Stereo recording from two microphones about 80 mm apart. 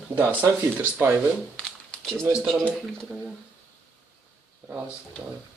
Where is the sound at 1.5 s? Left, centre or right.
Centre.